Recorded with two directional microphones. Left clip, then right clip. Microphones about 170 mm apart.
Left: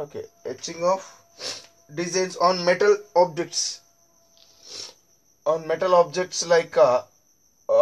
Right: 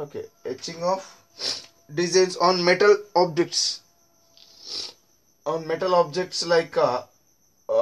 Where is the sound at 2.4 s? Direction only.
50° right (ahead or behind).